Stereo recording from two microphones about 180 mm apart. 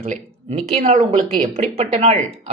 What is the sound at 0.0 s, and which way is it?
Speech, 35° right (ahead or behind).